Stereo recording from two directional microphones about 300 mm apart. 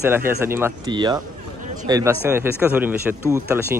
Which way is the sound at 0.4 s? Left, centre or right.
Centre.